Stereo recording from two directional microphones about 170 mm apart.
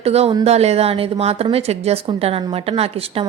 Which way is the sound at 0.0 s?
35° right (ahead or behind).